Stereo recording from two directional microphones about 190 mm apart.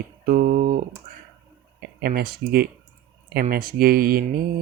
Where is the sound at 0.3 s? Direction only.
50° right (ahead or behind).